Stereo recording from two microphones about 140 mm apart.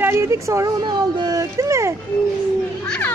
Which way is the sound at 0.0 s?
20° right (ahead or behind).